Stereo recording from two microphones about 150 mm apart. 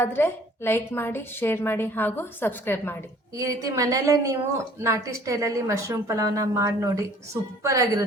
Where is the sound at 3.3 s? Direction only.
20° right (ahead or behind).